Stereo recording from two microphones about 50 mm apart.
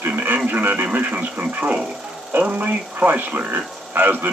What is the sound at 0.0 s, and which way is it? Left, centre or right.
Radio, right.